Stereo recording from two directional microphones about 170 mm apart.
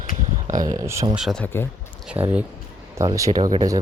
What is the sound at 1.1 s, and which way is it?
Speech, centre (ahead or behind).